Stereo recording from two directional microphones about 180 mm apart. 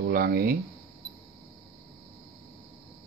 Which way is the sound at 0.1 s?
55° right (ahead or behind).